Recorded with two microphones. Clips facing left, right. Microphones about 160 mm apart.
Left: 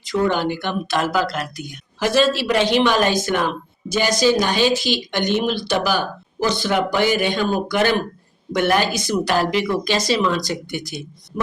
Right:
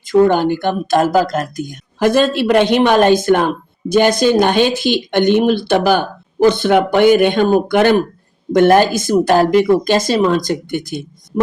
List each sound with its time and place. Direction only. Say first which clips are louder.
0.0 s speech: right 8 dB; 50° right (ahead or behind)